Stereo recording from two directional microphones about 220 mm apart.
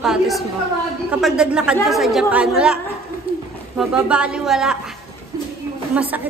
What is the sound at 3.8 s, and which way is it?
A woman's voice, 5° right (ahead or behind).